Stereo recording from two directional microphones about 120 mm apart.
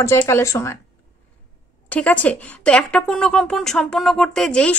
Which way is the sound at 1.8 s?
10° left (ahead or behind).